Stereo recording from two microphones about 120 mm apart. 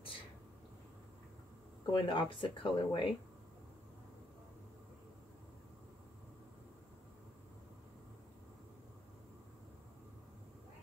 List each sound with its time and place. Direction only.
1.9 s speech: 45° left (ahead or behind)